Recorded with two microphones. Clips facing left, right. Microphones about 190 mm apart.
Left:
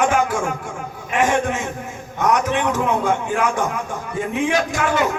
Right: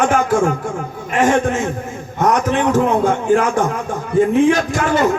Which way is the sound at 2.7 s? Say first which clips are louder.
Right 5 dB; 40° right (ahead or behind).